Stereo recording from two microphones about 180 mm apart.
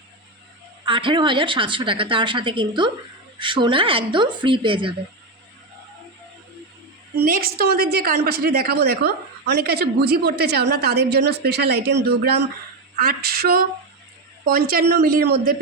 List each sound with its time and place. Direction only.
0.9 s a woman's voice: 25° right (ahead or behind)
7.2 s a woman's voice: 55° right (ahead or behind)